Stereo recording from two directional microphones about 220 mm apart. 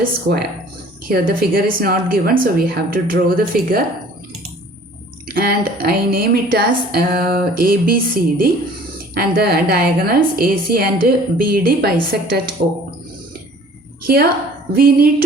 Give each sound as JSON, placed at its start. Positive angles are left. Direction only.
{"t": 0.0, "sound": "a woman's voice", "side_deg": -45}
{"t": 5.3, "sound": "a woman's voice", "side_deg": -45}
{"t": 14.7, "sound": "a woman's voice", "side_deg": -40}